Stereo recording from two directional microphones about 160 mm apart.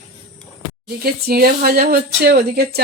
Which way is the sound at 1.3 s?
70° right (ahead or behind).